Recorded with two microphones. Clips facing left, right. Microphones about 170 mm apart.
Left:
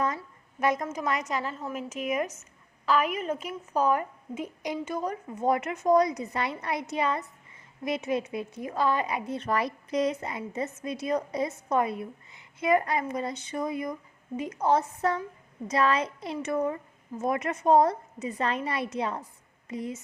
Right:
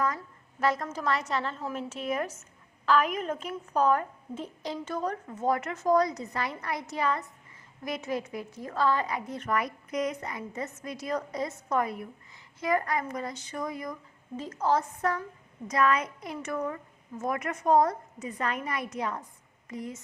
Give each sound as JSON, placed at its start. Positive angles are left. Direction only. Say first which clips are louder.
{"t": 0.2, "sound": "a woman's voice", "louder": "left 1 dB", "side_deg": 15}